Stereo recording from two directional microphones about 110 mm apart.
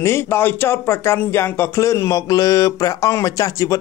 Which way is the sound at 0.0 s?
25° left (ahead or behind).